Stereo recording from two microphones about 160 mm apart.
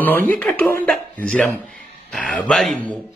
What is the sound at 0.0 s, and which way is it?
Speech, 10° left (ahead or behind).